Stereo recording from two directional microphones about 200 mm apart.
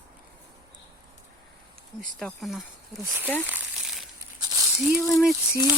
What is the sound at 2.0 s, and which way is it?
Speech, 5° left (ahead or behind).